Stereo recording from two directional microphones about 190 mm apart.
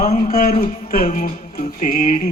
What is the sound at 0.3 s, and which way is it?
Music, 45° left (ahead or behind).